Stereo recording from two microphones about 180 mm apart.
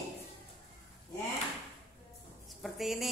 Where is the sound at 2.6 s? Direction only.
Centre (ahead or behind).